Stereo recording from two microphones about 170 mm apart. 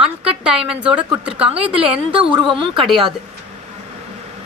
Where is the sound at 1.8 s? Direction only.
30° right (ahead or behind).